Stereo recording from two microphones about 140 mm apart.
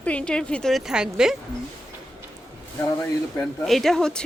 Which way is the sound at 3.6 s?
Centre (ahead or behind).